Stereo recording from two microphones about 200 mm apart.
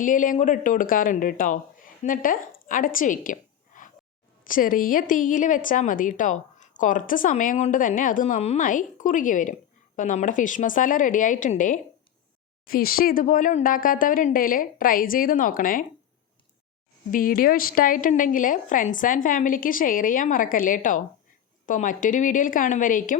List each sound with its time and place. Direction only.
0.0 s a woman's voice: 40° left (ahead or behind)
17.1 s a woman's voice: 45° left (ahead or behind)